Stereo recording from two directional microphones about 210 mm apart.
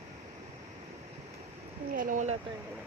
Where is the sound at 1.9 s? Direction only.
40° right (ahead or behind).